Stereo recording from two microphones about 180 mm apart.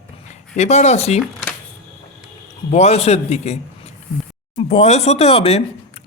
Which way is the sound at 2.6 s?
35° left (ahead or behind).